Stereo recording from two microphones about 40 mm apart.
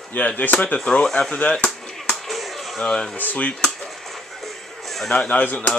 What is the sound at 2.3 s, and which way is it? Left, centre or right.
Chop, centre.